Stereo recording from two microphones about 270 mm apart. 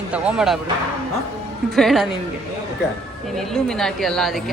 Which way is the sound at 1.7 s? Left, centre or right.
Centre.